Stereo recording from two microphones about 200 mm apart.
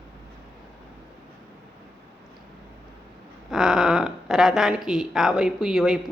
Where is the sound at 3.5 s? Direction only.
Centre (ahead or behind).